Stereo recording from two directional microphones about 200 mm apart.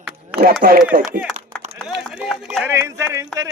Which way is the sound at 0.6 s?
40° right (ahead or behind).